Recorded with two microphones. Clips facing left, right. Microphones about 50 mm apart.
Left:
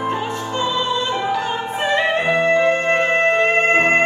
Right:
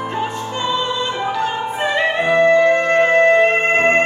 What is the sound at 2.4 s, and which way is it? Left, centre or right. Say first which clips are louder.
Music: right 6 dB; left.